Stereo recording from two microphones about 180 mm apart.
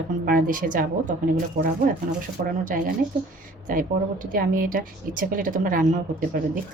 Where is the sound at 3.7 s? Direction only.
50° right (ahead or behind).